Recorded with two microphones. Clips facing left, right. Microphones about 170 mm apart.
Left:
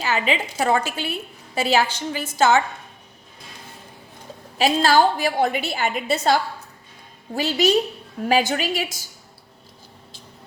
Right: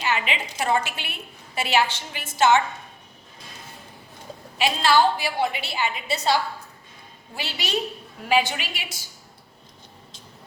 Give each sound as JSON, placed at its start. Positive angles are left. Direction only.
{"t": 0.1, "sound": "a woman's voice", "side_deg": 35}
{"t": 4.5, "sound": "a woman's voice", "side_deg": 40}